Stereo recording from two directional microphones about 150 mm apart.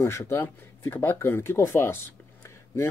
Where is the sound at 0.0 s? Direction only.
15° left (ahead or behind).